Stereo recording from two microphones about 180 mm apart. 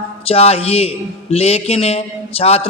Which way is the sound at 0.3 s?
35° left (ahead or behind).